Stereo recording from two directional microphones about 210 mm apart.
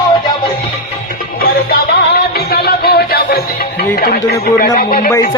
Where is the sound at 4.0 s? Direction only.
45° left (ahead or behind).